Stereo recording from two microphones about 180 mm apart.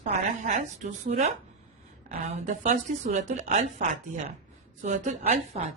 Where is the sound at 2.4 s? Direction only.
40° right (ahead or behind).